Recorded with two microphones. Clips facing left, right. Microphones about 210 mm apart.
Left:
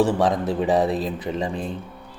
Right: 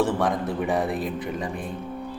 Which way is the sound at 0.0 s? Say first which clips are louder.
Left 3 dB; 20° left (ahead or behind).